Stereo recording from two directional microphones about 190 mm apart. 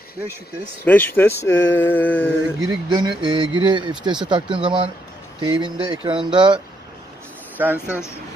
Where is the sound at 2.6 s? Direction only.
25° right (ahead or behind).